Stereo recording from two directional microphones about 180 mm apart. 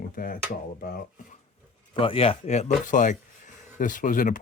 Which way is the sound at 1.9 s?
30° left (ahead or behind).